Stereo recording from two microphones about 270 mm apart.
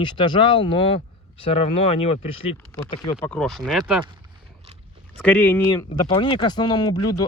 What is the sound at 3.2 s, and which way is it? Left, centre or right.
Speech, centre.